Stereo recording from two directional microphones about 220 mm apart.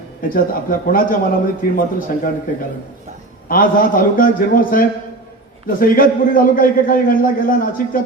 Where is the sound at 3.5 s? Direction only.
40° left (ahead or behind).